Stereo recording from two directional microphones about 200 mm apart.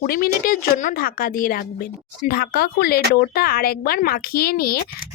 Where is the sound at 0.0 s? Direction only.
45° left (ahead or behind).